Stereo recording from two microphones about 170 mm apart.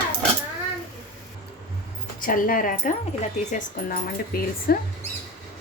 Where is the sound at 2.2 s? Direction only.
55° left (ahead or behind).